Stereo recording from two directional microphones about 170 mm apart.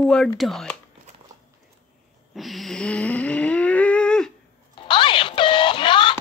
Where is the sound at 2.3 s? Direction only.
Centre (ahead or behind).